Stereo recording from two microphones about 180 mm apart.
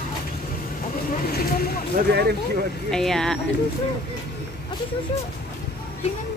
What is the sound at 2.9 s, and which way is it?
Speech, 5° left (ahead or behind).